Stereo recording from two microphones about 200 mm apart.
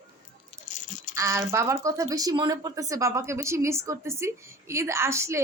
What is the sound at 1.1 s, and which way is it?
A woman's voice, 15° right (ahead or behind).